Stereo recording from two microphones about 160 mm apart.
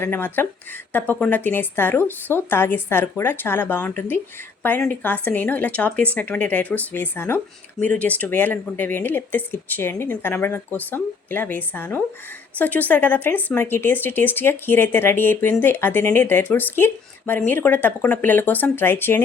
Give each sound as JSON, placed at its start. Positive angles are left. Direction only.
{"t": 0.0, "sound": "speech", "side_deg": 10}